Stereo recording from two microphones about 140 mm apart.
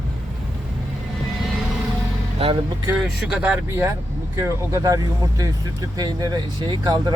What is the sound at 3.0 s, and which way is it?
Speech, 5° right (ahead or behind).